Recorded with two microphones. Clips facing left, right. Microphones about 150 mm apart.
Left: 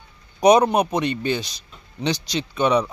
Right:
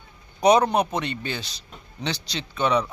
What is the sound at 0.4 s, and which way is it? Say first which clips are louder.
A man's voice: left 3 dB; 15° left (ahead or behind).